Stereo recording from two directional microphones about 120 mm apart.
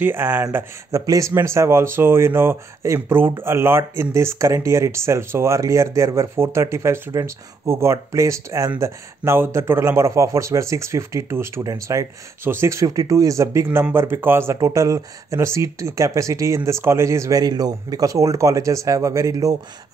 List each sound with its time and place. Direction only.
0.0 s speech: 15° right (ahead or behind)